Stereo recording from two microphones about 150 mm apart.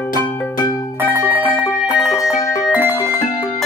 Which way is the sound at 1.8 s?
Centre (ahead or behind).